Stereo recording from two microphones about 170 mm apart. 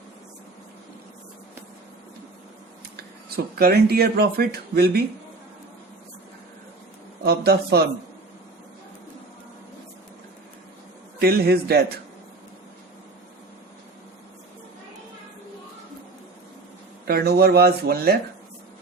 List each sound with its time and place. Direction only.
2.9 s speech: 65° right (ahead or behind)
7.3 s speech: 70° right (ahead or behind)
11.2 s a man's voice: 65° right (ahead or behind)
17.1 s speech: 70° right (ahead or behind)